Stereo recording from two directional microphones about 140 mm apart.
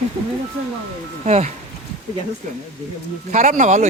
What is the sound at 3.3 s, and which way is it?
Speech, 70° right (ahead or behind).